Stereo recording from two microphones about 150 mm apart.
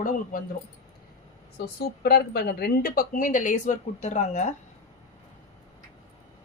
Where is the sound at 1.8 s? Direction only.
90° left; by 4.5 s 50° left (ahead or behind).